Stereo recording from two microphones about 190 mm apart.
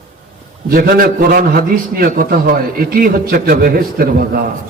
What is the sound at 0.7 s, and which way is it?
A man's voice, 50° right (ahead or behind).